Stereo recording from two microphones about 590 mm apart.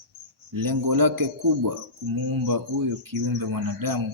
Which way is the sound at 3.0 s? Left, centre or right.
Right.